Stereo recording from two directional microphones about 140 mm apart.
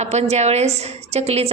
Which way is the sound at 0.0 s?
50° right (ahead or behind).